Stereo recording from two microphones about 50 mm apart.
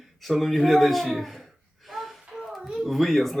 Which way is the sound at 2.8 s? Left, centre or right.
Centre.